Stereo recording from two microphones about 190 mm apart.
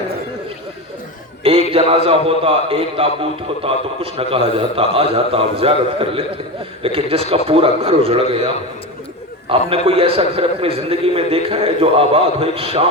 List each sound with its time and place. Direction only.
1.5 s a sound: 30° right (ahead or behind)
2.2 s a man's voice: 30° right (ahead or behind)
9.5 s a man's voice: 30° right (ahead or behind)